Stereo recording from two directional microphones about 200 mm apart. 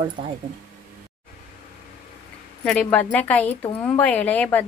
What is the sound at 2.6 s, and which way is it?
A woman's voice, 5° left (ahead or behind).